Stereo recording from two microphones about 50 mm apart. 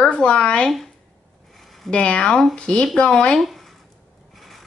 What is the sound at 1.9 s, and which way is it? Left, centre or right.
Speech, left.